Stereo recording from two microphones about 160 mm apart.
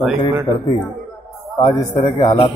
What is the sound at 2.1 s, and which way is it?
Speech, 35° left (ahead or behind).